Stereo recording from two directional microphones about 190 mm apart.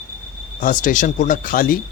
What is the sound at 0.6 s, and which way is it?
Speech, 45° left (ahead or behind).